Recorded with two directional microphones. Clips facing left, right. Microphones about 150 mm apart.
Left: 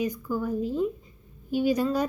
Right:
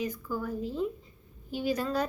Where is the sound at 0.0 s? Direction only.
15° left (ahead or behind).